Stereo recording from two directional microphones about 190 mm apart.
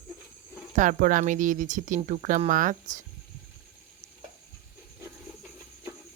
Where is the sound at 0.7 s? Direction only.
40° right (ahead or behind).